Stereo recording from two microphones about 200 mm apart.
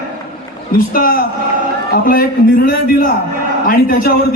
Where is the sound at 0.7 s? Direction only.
45° left (ahead or behind).